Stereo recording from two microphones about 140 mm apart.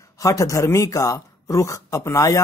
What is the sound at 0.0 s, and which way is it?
A woman's voice, 25° left (ahead or behind).